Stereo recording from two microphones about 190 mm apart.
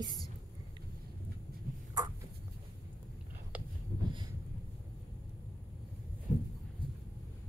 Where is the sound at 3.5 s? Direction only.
10° right (ahead or behind).